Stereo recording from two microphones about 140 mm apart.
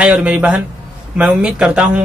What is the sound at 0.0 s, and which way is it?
Speech, 5° right (ahead or behind).